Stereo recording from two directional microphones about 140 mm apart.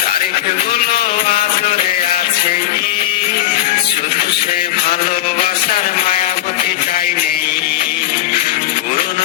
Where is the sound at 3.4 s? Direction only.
75° left (ahead or behind).